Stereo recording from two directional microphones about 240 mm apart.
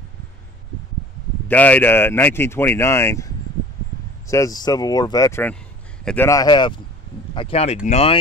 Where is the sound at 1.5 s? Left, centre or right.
Centre.